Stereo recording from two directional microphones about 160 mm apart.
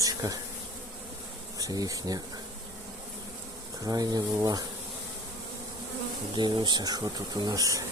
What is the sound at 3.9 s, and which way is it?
Speech, 25° right (ahead or behind).